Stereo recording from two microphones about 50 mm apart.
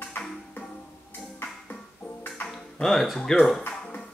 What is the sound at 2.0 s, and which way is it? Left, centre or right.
Music, left.